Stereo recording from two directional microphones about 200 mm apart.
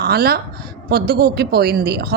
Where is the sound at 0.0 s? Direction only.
50° right (ahead or behind).